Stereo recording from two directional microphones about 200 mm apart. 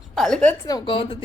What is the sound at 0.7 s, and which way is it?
Speech, 25° left (ahead or behind).